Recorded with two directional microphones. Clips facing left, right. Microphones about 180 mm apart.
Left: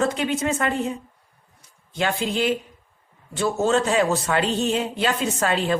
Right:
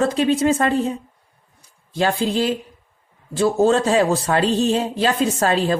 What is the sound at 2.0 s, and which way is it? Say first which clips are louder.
Speech: right 4 dB; 35° right (ahead or behind).